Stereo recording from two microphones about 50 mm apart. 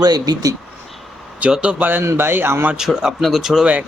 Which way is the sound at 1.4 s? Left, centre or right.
Right.